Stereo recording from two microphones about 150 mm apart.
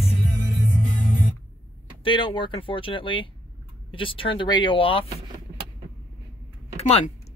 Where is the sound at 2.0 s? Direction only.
35° left (ahead or behind).